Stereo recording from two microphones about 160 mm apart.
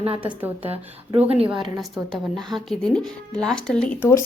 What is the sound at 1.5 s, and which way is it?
Speech, 30° right (ahead or behind).